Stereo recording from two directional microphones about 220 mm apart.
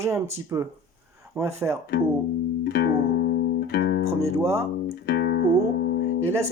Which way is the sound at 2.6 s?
50° left (ahead or behind).